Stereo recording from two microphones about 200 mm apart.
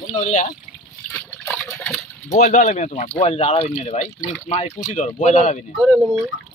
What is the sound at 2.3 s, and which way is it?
Speech, 45° left (ahead or behind).